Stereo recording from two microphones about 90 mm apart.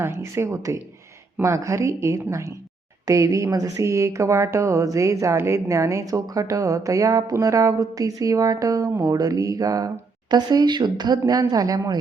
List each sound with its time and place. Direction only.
0.0 s speech: 30° right (ahead or behind)